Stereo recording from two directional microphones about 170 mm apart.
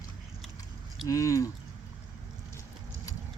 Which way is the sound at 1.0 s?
20° left (ahead or behind).